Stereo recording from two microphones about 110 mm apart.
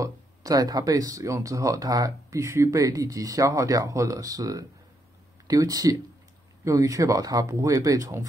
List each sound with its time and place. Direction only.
0.0 s speech: 30° right (ahead or behind)